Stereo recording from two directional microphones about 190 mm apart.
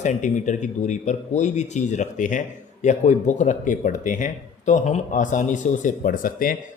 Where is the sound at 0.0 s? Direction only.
40° left (ahead or behind).